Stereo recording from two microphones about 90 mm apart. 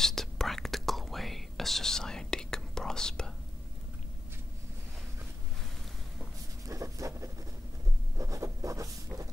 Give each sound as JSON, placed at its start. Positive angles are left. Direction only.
{"t": 0.0, "sound": "whispering", "side_deg": 5}
{"t": 6.7, "sound": "dog", "side_deg": -35}
{"t": 8.2, "sound": "writing", "side_deg": -35}